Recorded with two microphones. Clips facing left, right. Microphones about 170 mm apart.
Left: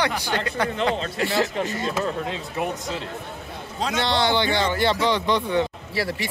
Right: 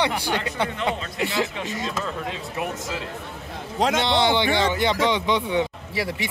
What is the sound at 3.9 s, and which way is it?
Speech, 20° right (ahead or behind).